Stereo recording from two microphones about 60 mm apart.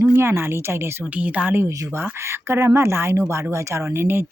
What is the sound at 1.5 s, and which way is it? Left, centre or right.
Speech, right.